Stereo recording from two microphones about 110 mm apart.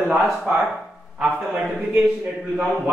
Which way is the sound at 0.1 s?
Centre (ahead or behind).